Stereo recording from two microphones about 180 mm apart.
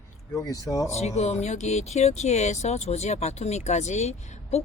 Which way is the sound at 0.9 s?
40° left (ahead or behind).